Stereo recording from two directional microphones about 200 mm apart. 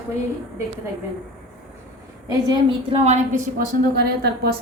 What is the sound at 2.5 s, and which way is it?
Speech, 30° right (ahead or behind).